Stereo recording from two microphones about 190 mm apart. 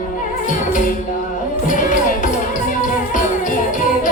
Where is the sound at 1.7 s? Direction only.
40° left (ahead or behind).